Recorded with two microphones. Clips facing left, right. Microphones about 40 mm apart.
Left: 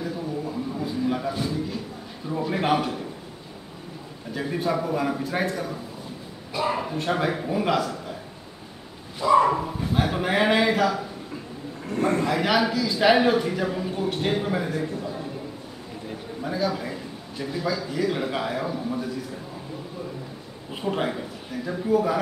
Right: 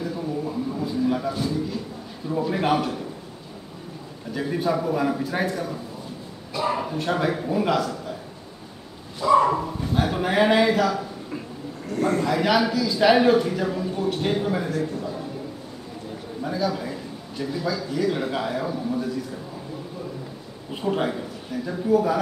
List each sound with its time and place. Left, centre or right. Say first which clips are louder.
0.8 s a sound: right 2 dB; centre
2.3 s a man's voice: right 1 dB; centre
4.3 s a man's voice: right 2 dB; centre
9.2 s a man's voice: even; centre
11.9 s a man's voice: even; left
12.3 s a man's voice: right 1 dB; centre
16.4 s a man's voice: right 1 dB; centre
20.7 s a man's voice: right 2 dB; centre